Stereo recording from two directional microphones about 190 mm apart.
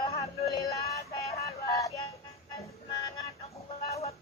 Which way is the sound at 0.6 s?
15° left (ahead or behind).